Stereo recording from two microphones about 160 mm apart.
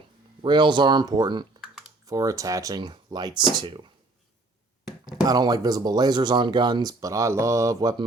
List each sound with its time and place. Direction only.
0.4 s speech: 30° right (ahead or behind)
5.0 s speech: 25° right (ahead or behind)